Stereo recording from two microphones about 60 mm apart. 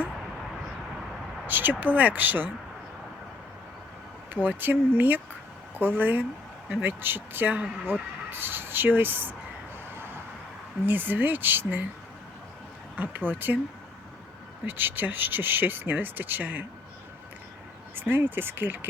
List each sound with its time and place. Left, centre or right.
1.5 s speech: right
4.4 s speech: right
9.9 s vehicle: right
10.8 s speech: right
13.0 s speech: right
14.7 s speech: right
17.9 s speech: right